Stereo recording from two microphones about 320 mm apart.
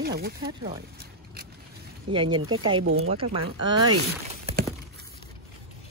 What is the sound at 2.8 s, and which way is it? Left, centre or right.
Speech, right.